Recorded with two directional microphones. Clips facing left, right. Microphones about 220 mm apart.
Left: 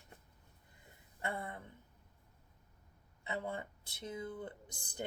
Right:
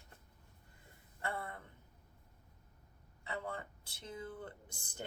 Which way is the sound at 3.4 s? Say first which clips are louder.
Left 2 dB; 20° left (ahead or behind).